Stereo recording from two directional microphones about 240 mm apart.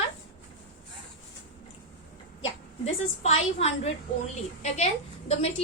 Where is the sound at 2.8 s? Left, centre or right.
Left.